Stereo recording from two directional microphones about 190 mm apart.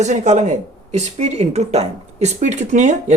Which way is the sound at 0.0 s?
35° right (ahead or behind).